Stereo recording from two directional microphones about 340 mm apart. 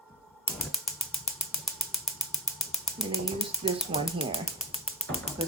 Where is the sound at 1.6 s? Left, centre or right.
Centre.